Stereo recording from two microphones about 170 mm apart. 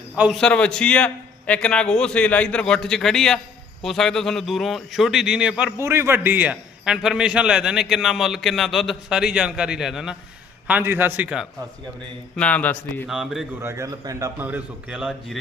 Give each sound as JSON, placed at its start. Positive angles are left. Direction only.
{"t": 0.2, "sound": "a man's voice", "side_deg": 0}
{"t": 12.4, "sound": "a man's voice", "side_deg": 10}
{"t": 13.1, "sound": "a man's voice", "side_deg": 0}
{"t": 13.6, "sound": "a man's voice", "side_deg": -15}
{"t": 14.4, "sound": "a man's voice", "side_deg": -10}